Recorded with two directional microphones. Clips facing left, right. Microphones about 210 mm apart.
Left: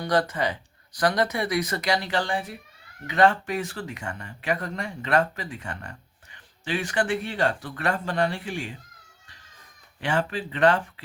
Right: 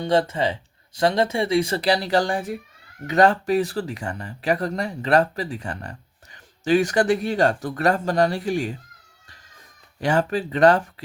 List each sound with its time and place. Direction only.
0.0 s speech: 25° right (ahead or behind)
10.0 s speech: 40° right (ahead or behind)